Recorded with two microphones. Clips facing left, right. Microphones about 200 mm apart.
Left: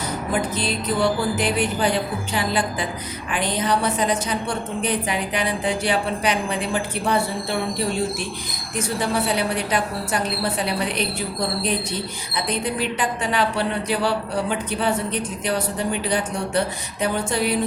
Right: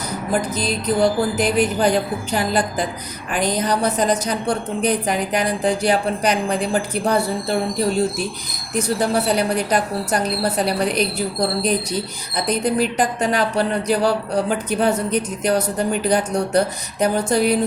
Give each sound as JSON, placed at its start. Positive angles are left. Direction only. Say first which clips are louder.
{"t": 0.5, "sound": "speech", "louder": "right 3 dB", "side_deg": -40}